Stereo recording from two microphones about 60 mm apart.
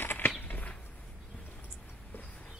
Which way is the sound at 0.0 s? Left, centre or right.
Left.